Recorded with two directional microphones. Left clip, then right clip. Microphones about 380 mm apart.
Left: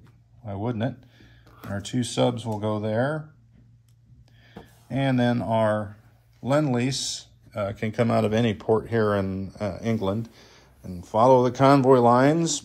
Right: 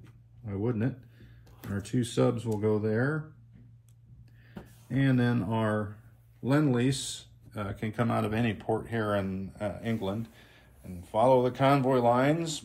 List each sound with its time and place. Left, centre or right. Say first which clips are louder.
0.5 s speech: left 3 dB; centre
4.9 s speech: left 5 dB; centre